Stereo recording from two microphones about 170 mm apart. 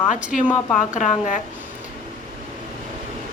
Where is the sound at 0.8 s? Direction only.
50° left (ahead or behind).